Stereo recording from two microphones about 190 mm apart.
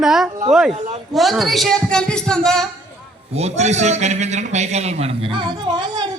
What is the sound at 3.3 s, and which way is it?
A man's voice, 35° right (ahead or behind).